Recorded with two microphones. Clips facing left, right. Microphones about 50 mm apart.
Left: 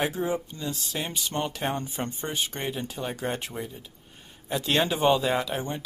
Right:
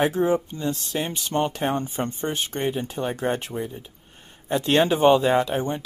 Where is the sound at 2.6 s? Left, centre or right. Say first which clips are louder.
Right 6 dB; centre.